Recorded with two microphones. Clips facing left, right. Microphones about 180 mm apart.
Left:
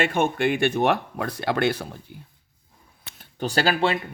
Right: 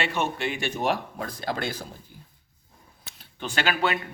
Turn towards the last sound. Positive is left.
turn(degrees=30)  # may be behind; listen again after turning